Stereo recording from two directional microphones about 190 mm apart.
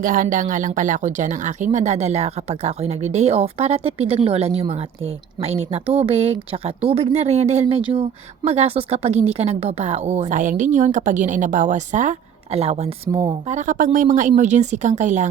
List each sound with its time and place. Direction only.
0.0 s speech: 45° right (ahead or behind)